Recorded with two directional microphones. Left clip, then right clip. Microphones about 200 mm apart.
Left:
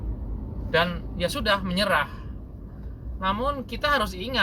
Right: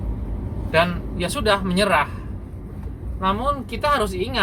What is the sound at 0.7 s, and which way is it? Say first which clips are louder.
Speech: right 4 dB; 30° left (ahead or behind).